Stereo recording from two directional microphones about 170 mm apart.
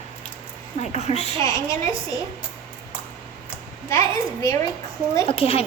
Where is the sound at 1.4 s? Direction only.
20° left (ahead or behind).